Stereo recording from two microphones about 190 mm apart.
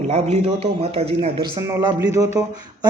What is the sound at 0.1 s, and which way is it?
A man's voice, 35° right (ahead or behind).